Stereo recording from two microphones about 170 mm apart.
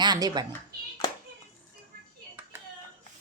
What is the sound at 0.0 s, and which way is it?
Speech, 25° right (ahead or behind).